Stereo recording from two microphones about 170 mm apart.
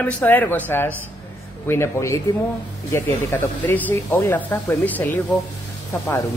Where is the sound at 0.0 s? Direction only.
10° left (ahead or behind).